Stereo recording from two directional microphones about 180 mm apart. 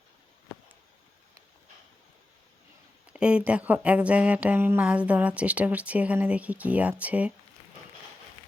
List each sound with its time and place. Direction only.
3.1 s speech: 5° right (ahead or behind)